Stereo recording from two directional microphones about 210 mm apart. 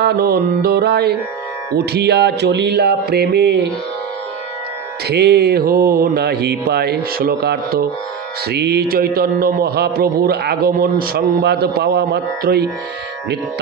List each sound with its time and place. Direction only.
0.0 s a man's voice: 50° right (ahead or behind)
5.0 s a man's voice: 50° right (ahead or behind)